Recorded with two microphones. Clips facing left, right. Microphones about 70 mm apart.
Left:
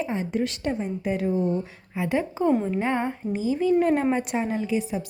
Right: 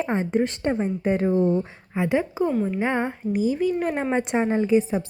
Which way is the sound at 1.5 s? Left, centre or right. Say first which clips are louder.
Right 4 dB; right.